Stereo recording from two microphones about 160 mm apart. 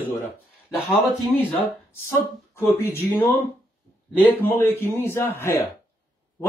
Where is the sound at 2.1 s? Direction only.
15° left (ahead or behind).